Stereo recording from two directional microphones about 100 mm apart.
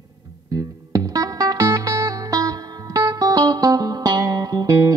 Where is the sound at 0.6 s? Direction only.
40° right (ahead or behind).